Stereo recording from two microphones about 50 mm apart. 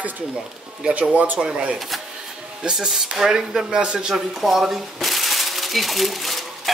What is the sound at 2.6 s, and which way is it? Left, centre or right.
Speech, centre.